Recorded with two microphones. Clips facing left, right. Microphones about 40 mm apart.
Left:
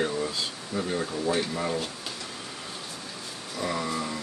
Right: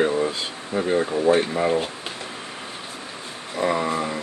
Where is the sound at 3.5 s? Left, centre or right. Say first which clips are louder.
Right 7 dB; right.